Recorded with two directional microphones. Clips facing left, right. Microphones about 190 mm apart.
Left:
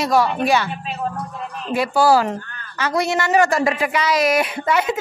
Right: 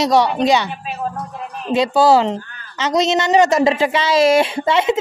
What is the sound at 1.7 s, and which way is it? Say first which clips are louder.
A woman's voice: right 3 dB; 20° right (ahead or behind).